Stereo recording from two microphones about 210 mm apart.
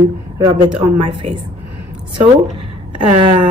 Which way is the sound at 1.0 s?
25° right (ahead or behind).